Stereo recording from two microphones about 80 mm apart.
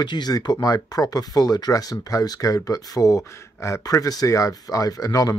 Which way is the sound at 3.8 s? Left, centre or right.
Left.